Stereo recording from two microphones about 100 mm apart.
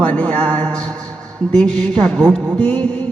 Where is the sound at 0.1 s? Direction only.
15° left (ahead or behind).